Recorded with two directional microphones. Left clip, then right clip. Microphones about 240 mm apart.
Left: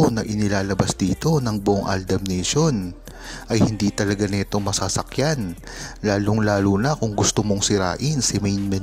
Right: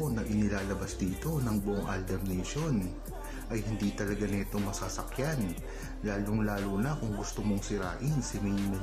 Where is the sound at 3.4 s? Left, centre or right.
Left.